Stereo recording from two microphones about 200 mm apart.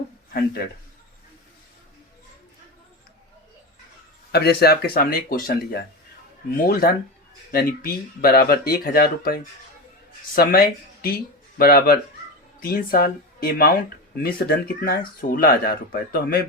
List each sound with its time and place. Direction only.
4.3 s speech: 50° left (ahead or behind)